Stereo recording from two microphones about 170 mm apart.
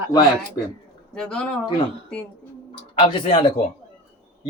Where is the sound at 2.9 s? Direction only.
30° left (ahead or behind).